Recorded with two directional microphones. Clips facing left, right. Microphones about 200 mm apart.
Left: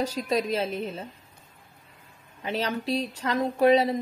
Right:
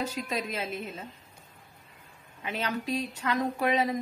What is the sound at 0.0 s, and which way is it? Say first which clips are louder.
A woman's voice: left 6 dB; 35° left (ahead or behind).